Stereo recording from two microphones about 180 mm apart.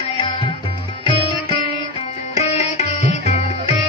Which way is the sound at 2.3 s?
35° left (ahead or behind).